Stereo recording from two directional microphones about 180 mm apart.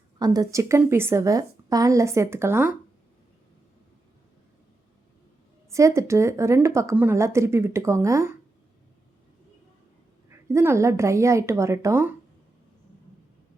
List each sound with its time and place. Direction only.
0.2 s a woman's voice: 20° right (ahead or behind)
5.7 s a woman's voice: 15° right (ahead or behind)
10.2 s a woman's voice: 15° right (ahead or behind)